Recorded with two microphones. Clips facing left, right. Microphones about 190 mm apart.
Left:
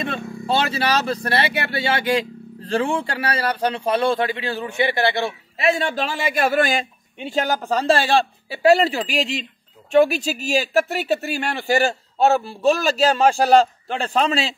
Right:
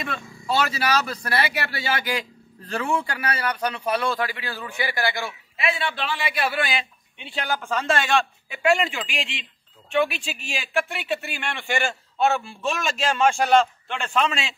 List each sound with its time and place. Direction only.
0.5 s speech: 30° left (ahead or behind)